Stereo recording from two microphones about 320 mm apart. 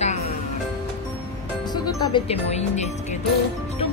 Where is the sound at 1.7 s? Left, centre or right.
Centre.